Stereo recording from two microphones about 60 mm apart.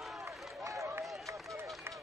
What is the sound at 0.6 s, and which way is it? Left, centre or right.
Run, right.